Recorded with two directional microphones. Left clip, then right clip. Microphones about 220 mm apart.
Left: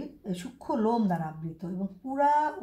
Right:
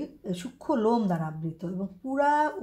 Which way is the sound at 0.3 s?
45° right (ahead or behind).